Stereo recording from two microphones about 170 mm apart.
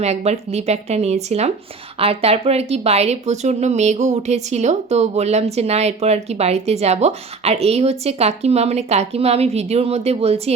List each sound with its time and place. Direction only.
0.0 s speech: 40° right (ahead or behind)